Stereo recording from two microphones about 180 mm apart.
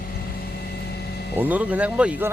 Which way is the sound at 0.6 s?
65° left (ahead or behind).